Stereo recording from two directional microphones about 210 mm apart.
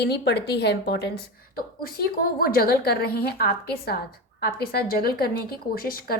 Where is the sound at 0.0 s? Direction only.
55° left (ahead or behind).